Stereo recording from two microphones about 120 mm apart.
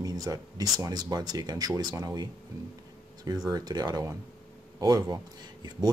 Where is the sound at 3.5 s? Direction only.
30° right (ahead or behind).